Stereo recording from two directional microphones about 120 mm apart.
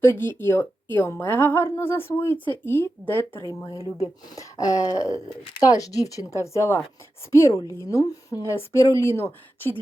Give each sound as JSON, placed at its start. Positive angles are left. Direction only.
{"t": 0.0, "sound": "a woman's voice", "side_deg": 20}
{"t": 3.8, "sound": "speech", "side_deg": -25}
{"t": 4.4, "sound": "speech", "side_deg": 25}